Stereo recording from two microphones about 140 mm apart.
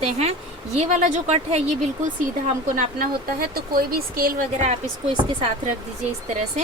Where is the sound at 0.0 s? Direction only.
50° right (ahead or behind).